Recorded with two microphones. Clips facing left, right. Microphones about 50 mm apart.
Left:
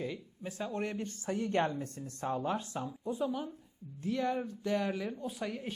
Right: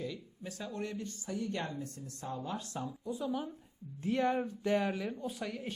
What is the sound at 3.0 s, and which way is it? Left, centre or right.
Speech, left.